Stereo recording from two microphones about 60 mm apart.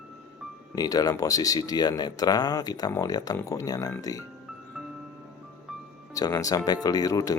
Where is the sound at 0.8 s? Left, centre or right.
Left.